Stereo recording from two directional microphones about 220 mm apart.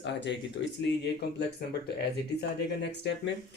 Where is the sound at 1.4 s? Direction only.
50° left (ahead or behind).